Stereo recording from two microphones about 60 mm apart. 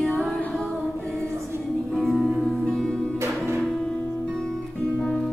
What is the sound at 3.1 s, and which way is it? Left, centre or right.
Music, right.